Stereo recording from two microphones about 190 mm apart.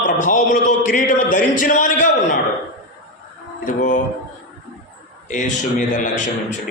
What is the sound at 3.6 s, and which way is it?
Speech, 40° left (ahead or behind).